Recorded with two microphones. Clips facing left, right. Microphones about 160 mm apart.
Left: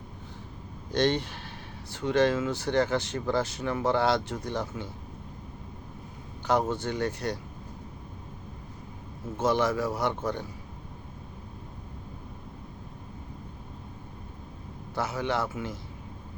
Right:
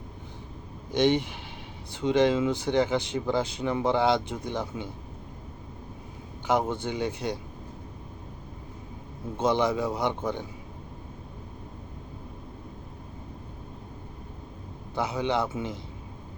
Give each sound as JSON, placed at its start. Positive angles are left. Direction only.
{"t": 1.0, "sound": "speech", "side_deg": -15}
{"t": 6.5, "sound": "speech", "side_deg": -15}
{"t": 9.4, "sound": "speech", "side_deg": -15}
{"t": 14.9, "sound": "speech", "side_deg": -15}